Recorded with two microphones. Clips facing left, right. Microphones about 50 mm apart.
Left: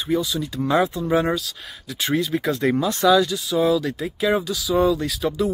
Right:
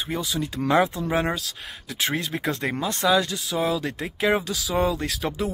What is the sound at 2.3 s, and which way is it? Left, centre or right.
Speech, right.